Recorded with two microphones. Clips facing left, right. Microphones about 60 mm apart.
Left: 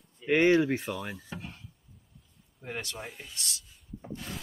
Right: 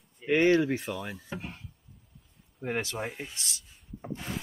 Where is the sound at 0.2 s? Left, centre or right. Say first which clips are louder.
Even; right.